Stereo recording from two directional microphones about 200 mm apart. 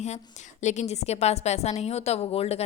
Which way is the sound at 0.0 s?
35° left (ahead or behind).